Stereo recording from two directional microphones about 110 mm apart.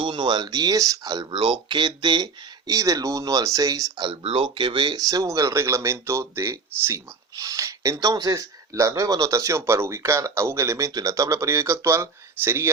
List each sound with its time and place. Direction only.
0.0 s speech: 45° right (ahead or behind)
1.3 s speech: 50° right (ahead or behind)
4.2 s speech: 55° right (ahead or behind); by 12.7 s 20° right (ahead or behind)